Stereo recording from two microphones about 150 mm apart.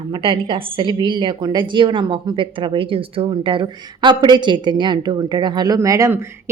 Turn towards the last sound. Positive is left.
turn(degrees=-20)  # may be behind; listen again after turning